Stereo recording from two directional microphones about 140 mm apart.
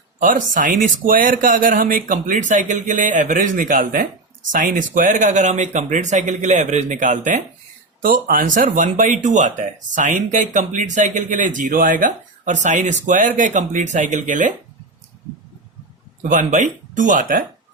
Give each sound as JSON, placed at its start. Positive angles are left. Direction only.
{"t": 0.2, "sound": "speech", "side_deg": -70}
{"t": 8.0, "sound": "speech", "side_deg": -80}
{"t": 16.2, "sound": "speech", "side_deg": -65}